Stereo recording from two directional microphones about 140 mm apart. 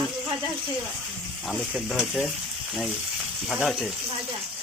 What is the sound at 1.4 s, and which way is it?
Frying, centre (ahead or behind).